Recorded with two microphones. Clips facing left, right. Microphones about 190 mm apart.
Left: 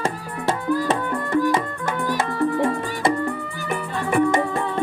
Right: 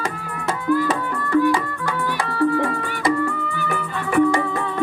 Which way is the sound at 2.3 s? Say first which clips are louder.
Right 3 dB; 20° left (ahead or behind).